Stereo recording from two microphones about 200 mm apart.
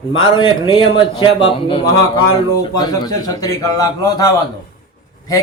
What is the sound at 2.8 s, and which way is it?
A man's voice, 20° left (ahead or behind).